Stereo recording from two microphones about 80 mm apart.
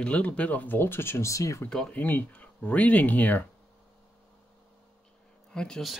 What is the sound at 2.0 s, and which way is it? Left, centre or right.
Speech, left.